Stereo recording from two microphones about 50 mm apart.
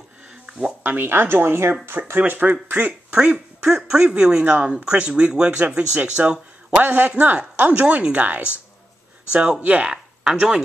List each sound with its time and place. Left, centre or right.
0.5 s music: centre
0.8 s speech: right
2.1 s a man's voice: right
7.8 s speech: centre
8.1 s speech: right
9.3 s speech: centre
9.6 s a man's voice: right
9.8 s speech: centre